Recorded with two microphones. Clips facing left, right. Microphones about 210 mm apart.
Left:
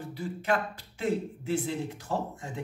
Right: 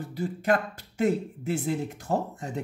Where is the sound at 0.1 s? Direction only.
40° right (ahead or behind).